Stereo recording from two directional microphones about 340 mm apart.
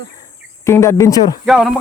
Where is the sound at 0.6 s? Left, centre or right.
Centre.